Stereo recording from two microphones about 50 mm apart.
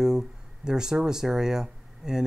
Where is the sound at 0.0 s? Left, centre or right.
Centre.